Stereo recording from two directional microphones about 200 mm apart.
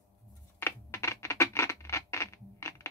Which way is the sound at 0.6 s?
10° left (ahead or behind).